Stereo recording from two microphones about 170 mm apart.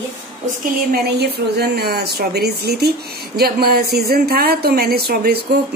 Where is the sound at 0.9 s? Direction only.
75° right (ahead or behind).